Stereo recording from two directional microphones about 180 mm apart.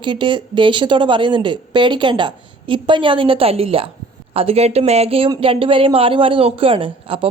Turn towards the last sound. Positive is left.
turn(degrees=-30)  # may be behind; listen again after turning